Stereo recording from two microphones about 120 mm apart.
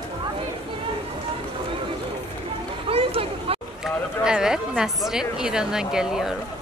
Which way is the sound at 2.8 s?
50° right (ahead or behind).